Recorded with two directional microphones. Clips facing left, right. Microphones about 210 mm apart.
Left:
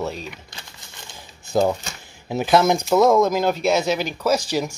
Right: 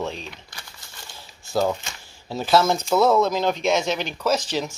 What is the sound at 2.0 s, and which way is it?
Speech, 15° left (ahead or behind).